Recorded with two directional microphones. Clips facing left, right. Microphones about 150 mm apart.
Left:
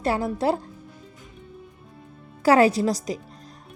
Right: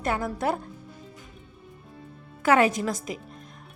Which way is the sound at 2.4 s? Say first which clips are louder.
Left 4 dB; 35° left (ahead or behind).